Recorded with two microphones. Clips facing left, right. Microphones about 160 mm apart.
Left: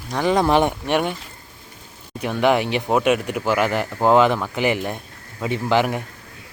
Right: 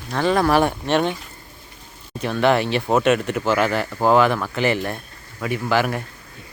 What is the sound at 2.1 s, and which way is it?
A man's voice, 15° left (ahead or behind).